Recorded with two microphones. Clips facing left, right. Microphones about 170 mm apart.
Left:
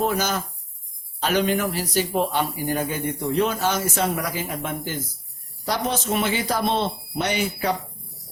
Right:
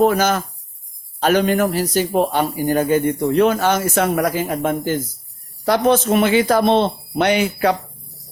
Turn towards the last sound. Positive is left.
turn(degrees=-65)  # may be behind; listen again after turning